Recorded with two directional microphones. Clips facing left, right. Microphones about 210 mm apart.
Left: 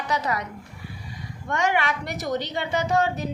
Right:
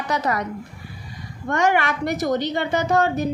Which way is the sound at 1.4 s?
45° right (ahead or behind).